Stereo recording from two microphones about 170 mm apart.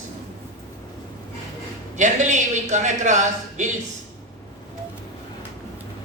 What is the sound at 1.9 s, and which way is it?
Speech, 45° right (ahead or behind).